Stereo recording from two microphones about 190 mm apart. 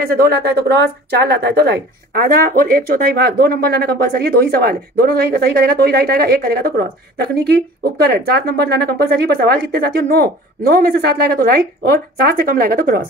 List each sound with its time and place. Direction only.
0.0 s speech: 50° right (ahead or behind)